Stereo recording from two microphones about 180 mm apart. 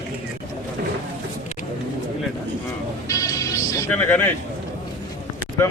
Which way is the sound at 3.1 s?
20° left (ahead or behind).